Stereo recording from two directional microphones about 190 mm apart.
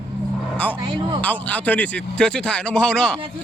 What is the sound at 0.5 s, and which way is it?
Speech, 5° left (ahead or behind).